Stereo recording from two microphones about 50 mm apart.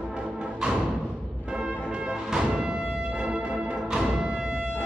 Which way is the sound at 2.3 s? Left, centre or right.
Centre.